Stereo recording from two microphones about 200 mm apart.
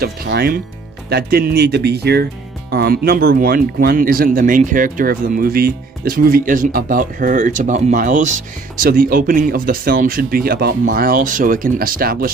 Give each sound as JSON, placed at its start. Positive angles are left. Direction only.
{"t": 0.0, "sound": "speech", "side_deg": -50}